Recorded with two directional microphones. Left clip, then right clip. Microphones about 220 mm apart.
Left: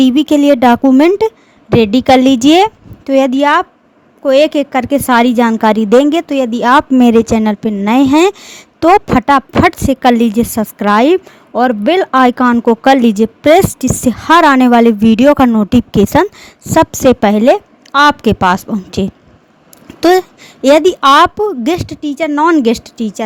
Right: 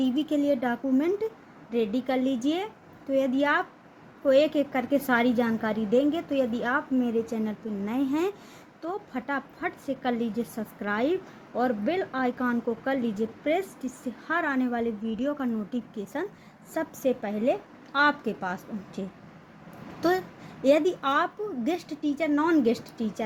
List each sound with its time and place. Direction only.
0.0 s a woman's voice: 50° left (ahead or behind)